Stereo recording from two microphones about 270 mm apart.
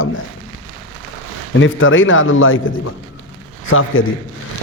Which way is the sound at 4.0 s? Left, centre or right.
Left.